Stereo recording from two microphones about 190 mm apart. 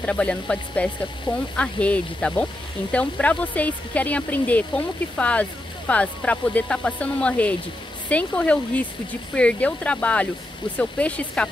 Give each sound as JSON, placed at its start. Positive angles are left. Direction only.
{"t": 0.0, "sound": "speech", "side_deg": 5}